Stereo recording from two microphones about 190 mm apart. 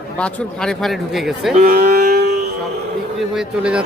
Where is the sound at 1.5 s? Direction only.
50° right (ahead or behind).